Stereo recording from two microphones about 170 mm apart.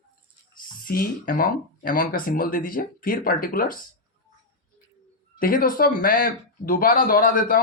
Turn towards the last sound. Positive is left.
turn(degrees=55)  # may be behind; listen again after turning